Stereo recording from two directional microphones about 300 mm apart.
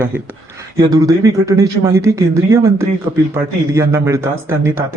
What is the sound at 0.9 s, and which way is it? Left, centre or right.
Speech, centre.